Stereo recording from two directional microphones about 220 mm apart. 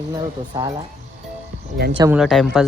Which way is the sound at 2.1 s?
Centre (ahead or behind).